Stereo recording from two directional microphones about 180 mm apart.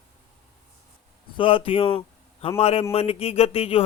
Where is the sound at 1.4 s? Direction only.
30° left (ahead or behind).